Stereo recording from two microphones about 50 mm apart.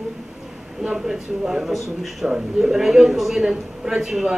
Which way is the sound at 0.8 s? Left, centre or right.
Centre.